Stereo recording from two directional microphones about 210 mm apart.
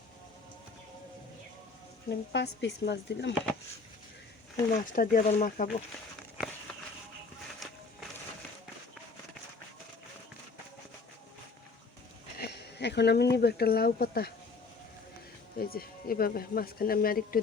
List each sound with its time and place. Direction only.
2.0 s speech: 55° left (ahead or behind)
4.7 s speech: 40° left (ahead or behind)
7.6 s run: centre (ahead or behind)
12.4 s speech: 50° left (ahead or behind)
15.5 s speech: 45° left (ahead or behind)